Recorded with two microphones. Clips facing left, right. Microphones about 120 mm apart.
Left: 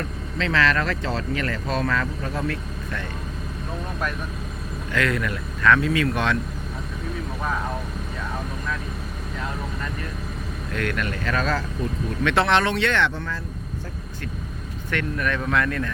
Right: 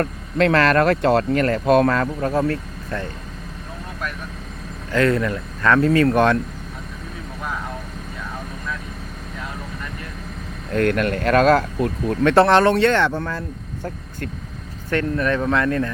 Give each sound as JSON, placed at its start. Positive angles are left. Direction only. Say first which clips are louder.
{"t": 0.0, "sound": "speech", "louder": "right 9 dB", "side_deg": -55}
{"t": 4.9, "sound": "speech", "louder": "right 6 dB", "side_deg": -35}
{"t": 10.7, "sound": "speech", "louder": "right 8 dB", "side_deg": -45}
{"t": 12.2, "sound": "speech", "louder": "right 7 dB", "side_deg": -40}
{"t": 14.8, "sound": "speech", "louder": "right 6 dB", "side_deg": -35}